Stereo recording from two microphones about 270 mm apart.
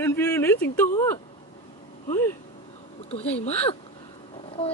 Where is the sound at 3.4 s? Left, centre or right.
Left.